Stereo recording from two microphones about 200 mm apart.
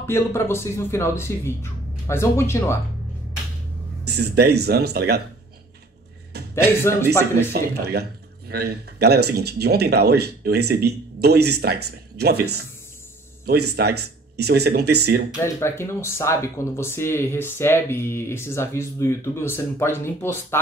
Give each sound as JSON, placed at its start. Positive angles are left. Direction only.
{"t": 0.0, "sound": "speech", "side_deg": 10}
{"t": 4.0, "sound": "speech", "side_deg": -55}
{"t": 6.3, "sound": "a sound", "side_deg": -55}
{"t": 7.5, "sound": "speech", "side_deg": -55}
{"t": 15.4, "sound": "speech", "side_deg": 15}